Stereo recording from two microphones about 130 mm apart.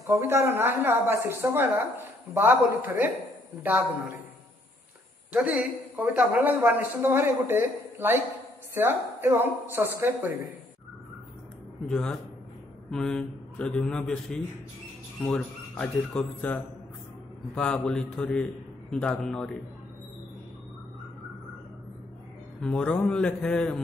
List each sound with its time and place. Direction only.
0.0 s a man's voice: 20° right (ahead or behind)
5.3 s a man's voice: 10° right (ahead or behind)
11.9 s a man's voice: 5° left (ahead or behind)
22.6 s a man's voice: 10° left (ahead or behind)